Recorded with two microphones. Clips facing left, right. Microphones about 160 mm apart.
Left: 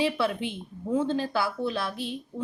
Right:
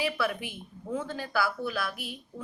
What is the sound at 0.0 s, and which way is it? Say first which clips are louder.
Speech: left 4 dB; 25° left (ahead or behind).